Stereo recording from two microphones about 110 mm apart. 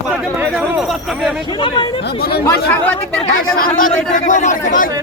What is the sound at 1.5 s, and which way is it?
Speech, 50° left (ahead or behind).